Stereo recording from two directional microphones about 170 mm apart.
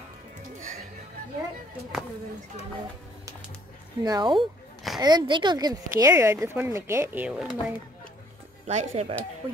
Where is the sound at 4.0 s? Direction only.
25° right (ahead or behind); by 7.5 s 5° right (ahead or behind).